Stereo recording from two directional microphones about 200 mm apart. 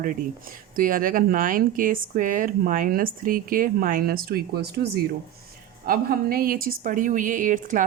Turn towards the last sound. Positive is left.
turn(degrees=-40)  # may be behind; listen again after turning